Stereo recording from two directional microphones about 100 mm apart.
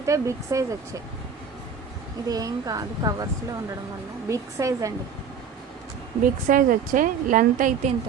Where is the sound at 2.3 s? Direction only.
40° right (ahead or behind).